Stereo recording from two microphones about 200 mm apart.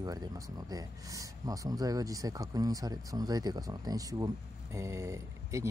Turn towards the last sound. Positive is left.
turn(degrees=-15)  # may be behind; listen again after turning